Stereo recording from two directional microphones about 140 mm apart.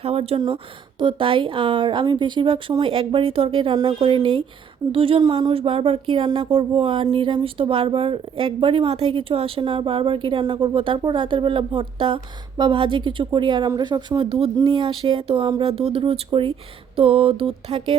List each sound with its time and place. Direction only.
0.0 s speech: 45° right (ahead or behind)